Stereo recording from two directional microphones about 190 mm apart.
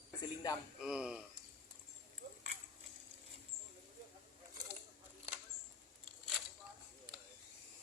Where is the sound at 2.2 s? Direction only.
55° right (ahead or behind).